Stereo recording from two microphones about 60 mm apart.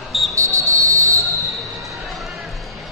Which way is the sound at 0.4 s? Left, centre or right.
Right.